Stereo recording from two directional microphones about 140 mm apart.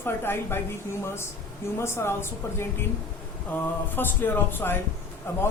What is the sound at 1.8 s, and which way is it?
Speech, 15° left (ahead or behind).